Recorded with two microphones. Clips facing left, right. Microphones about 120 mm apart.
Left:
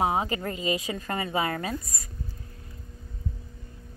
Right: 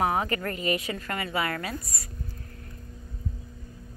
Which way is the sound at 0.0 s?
20° left (ahead or behind).